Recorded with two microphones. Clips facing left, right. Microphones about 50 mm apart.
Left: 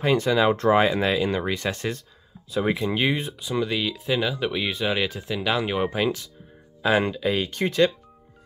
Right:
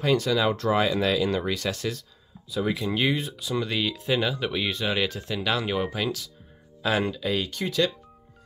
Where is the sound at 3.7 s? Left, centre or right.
Centre; by 7.9 s left.